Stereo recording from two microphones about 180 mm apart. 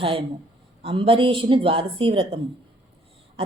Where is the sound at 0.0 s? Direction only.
30° right (ahead or behind).